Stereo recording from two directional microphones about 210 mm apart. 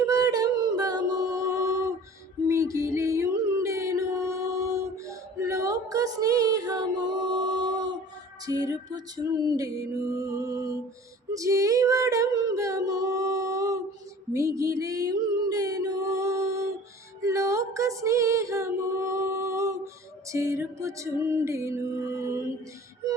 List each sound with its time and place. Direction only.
0.1 s a sound: 15° right (ahead or behind)
2.5 s music: 15° right (ahead or behind)
5.0 s a sound: 15° right (ahead or behind)
8.4 s music: 15° right (ahead or behind)
11.3 s female singing: 15° right (ahead or behind)
14.3 s music: 15° right (ahead or behind)
17.2 s female singing: 15° right (ahead or behind)
20.3 s music: 15° right (ahead or behind)